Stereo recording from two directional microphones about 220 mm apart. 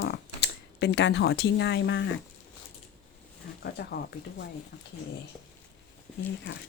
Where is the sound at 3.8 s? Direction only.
45° left (ahead or behind).